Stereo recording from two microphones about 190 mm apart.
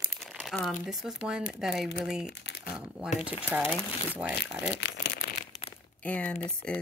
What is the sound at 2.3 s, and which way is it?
Crumpling, 60° left (ahead or behind).